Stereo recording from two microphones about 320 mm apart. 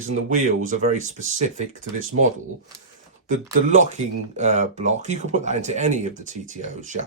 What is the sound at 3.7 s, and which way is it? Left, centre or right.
Speech, right.